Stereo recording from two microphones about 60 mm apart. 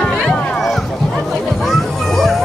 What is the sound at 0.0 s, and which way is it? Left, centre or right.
Music, centre.